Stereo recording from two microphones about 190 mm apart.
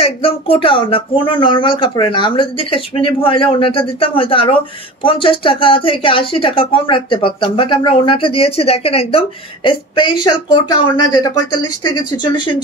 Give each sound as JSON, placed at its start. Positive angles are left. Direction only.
{"t": 0.0, "sound": "a woman's voice", "side_deg": 30}